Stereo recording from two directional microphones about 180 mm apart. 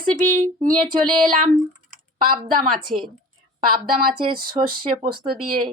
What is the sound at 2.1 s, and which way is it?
Speech, 55° right (ahead or behind).